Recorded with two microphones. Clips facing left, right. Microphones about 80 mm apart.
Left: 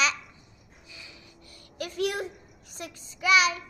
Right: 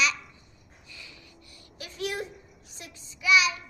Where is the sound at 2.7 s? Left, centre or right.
Left.